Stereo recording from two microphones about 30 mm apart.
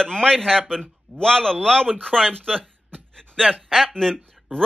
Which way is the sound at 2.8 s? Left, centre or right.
Left.